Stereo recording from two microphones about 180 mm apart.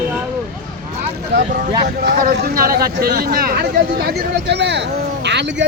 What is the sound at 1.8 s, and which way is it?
Speech, 60° right (ahead or behind).